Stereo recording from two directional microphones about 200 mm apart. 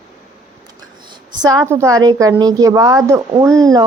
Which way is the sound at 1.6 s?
15° right (ahead or behind).